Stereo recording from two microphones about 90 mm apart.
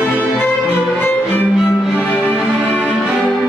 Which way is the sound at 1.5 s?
10° right (ahead or behind).